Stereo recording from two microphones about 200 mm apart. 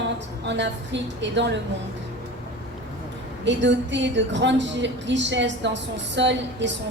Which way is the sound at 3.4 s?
65° right (ahead or behind).